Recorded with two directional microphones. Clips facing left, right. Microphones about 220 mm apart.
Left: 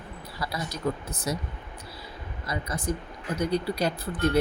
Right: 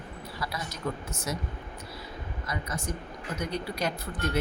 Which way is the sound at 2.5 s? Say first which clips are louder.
Left 5 dB; 35° left (ahead or behind).